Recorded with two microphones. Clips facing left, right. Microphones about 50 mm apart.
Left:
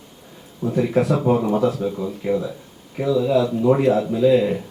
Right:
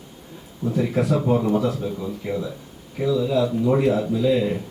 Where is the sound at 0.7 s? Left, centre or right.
Left.